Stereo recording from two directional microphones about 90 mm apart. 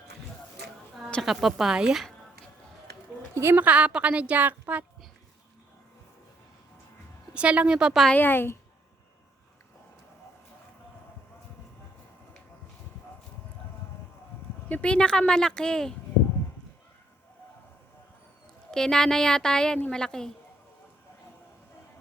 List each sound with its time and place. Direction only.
1.2 s a woman's voice: centre (ahead or behind)
3.3 s speech: 25° right (ahead or behind)
7.3 s speech: 15° right (ahead or behind)
8.1 s a woman's voice: 20° left (ahead or behind)
14.7 s speech: 15° left (ahead or behind)
18.7 s speech: 5° left (ahead or behind)